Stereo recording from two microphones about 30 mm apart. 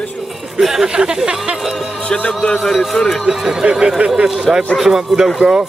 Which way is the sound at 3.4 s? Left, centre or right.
Centre.